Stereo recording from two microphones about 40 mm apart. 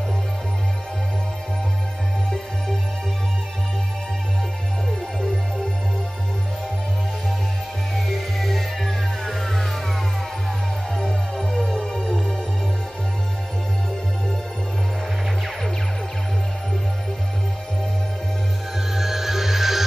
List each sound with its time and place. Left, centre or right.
7.9 s music: centre
11.3 s music: centre
18.9 s music: centre